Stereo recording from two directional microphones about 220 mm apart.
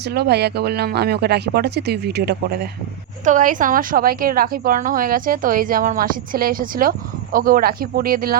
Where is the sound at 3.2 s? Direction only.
35° right (ahead or behind).